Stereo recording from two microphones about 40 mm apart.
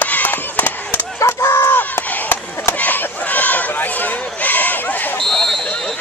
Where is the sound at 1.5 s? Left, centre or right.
Left.